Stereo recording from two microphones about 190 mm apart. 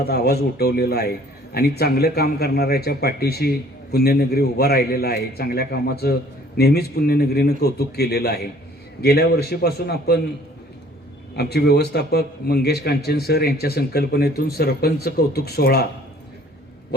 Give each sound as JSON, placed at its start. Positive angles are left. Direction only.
{"t": 0.0, "sound": "a man's voice", "side_deg": 55}
{"t": 11.3, "sound": "a man's voice", "side_deg": 60}